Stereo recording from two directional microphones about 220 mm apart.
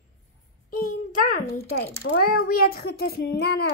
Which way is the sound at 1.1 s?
35° left (ahead or behind).